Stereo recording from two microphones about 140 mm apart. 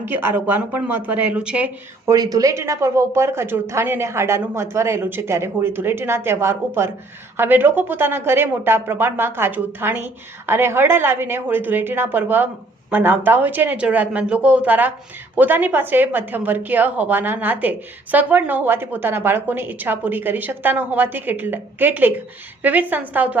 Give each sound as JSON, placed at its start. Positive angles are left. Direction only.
{"t": 0.0, "sound": "a woman's voice", "side_deg": -15}
{"t": 2.0, "sound": "a woman's voice", "side_deg": -25}